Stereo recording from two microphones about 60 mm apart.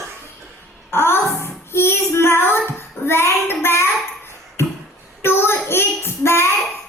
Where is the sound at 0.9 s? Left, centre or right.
Left.